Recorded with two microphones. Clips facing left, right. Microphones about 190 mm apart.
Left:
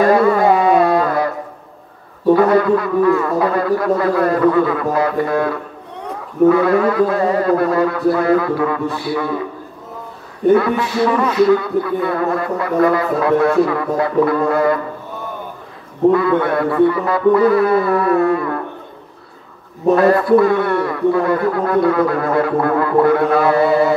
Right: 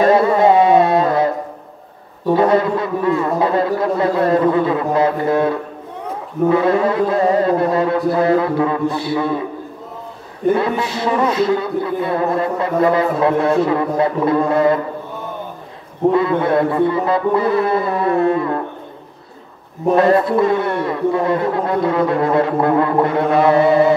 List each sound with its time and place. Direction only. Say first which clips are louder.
0.0 s music: even; 25° right (ahead or behind)
2.3 s speech: left 1 dB; 25° right (ahead or behind)
10.5 s speech: left 4 dB; 25° right (ahead or behind)
16.1 s speech: left 1 dB; 25° right (ahead or behind)
20.0 s speech: left 1 dB; 25° right (ahead or behind)